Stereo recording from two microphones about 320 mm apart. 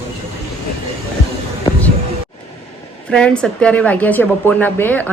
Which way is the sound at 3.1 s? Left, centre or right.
Centre.